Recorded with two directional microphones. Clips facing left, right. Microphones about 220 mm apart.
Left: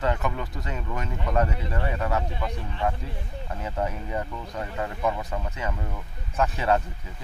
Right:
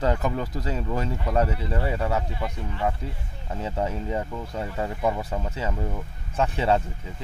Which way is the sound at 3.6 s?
25° right (ahead or behind).